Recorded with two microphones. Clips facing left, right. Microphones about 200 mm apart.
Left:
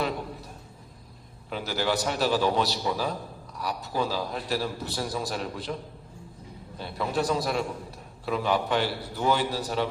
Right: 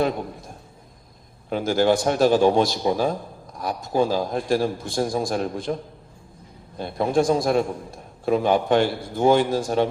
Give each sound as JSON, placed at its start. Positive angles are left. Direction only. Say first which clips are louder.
{"t": 1.5, "sound": "a man's voice", "louder": "right 9 dB", "side_deg": -45}